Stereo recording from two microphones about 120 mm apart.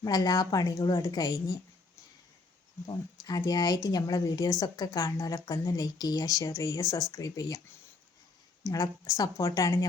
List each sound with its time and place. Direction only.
0.0 s a woman's voice: 35° left (ahead or behind)
0.8 s a woman's voice: 40° left (ahead or behind)
2.8 s a woman's voice: 30° left (ahead or behind)
8.6 s a woman's voice: 30° left (ahead or behind)